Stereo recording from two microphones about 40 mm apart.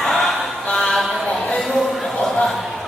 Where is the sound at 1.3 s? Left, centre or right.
Left.